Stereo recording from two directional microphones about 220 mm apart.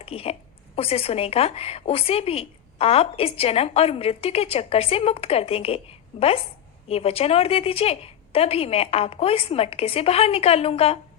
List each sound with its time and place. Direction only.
0.0 s a woman's voice: 25° left (ahead or behind)